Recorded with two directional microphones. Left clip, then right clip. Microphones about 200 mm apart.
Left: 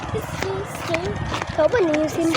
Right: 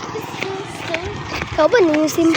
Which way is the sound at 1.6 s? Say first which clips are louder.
Right 5 dB; 45° right (ahead or behind).